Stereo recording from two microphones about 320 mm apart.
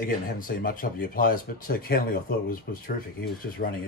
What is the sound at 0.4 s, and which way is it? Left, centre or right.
Speech, left.